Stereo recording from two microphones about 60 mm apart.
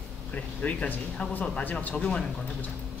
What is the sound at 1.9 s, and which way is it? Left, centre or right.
Speech, centre.